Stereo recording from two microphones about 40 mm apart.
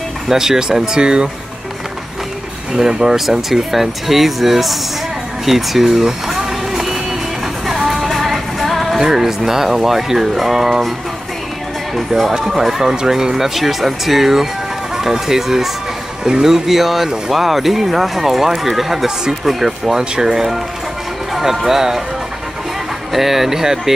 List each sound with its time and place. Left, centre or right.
0.3 s speech: centre
2.8 s speech: centre
5.4 s vehicle: centre
7.6 s music: centre
9.0 s speech: centre
11.9 s speech: centre
23.1 s speech: centre